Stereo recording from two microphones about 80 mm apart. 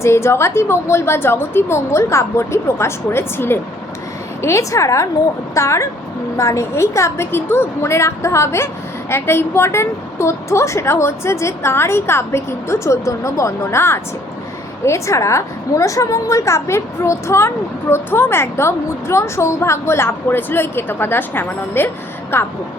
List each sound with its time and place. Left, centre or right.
0.0 s a woman's voice: left